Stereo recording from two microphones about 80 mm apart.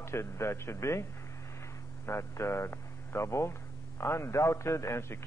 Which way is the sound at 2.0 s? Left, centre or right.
Left.